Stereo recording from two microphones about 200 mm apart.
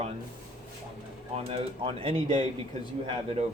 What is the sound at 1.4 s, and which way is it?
Speech, 25° right (ahead or behind).